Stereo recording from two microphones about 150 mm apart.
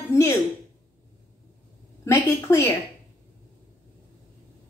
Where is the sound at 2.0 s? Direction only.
15° left (ahead or behind).